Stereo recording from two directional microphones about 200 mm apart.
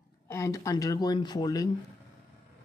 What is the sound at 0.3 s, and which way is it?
Speech, 15° left (ahead or behind).